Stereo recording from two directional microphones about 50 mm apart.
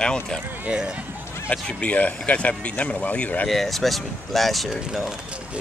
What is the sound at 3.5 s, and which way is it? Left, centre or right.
Speech, centre.